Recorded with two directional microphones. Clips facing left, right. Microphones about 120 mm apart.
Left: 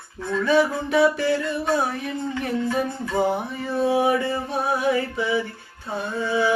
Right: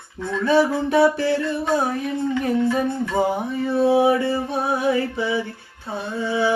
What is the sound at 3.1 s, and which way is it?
Music, 15° right (ahead or behind).